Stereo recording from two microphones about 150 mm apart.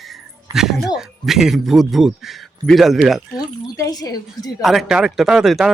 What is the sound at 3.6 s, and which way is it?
Speech, 25° left (ahead or behind).